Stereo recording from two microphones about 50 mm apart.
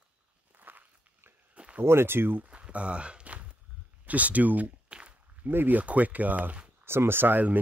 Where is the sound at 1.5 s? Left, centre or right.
Right.